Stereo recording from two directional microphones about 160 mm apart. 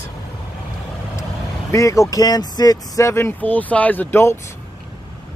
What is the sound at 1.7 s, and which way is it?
Speech, 20° left (ahead or behind).